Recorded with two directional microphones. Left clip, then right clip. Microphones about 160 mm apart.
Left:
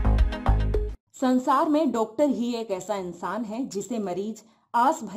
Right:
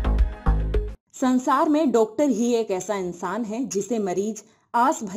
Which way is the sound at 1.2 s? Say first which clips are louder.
Right 2 dB; 15° right (ahead or behind).